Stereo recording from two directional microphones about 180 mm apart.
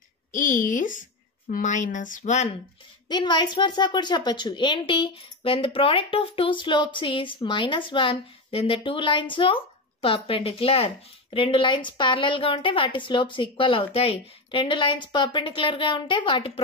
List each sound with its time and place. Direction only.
0.3 s a woman's voice: 45° left (ahead or behind)
3.1 s speech: 25° left (ahead or behind)